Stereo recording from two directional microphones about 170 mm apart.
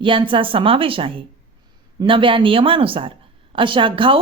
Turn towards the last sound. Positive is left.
turn(degrees=-30)  # may be behind; listen again after turning